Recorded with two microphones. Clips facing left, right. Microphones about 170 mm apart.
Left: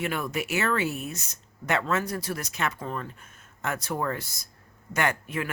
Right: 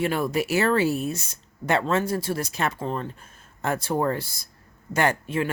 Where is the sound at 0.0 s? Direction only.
35° right (ahead or behind).